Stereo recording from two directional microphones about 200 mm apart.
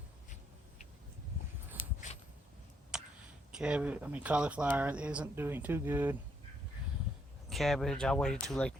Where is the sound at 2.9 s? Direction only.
5° right (ahead or behind).